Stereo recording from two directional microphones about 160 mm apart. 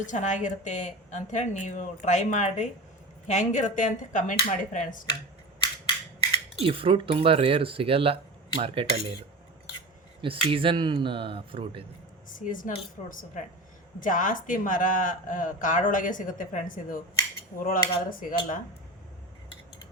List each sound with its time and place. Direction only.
0.0 s a woman's voice: 50° left (ahead or behind)
6.6 s speech: 35° right (ahead or behind)
10.2 s speech: 35° right (ahead or behind)
12.3 s speech: 55° left (ahead or behind)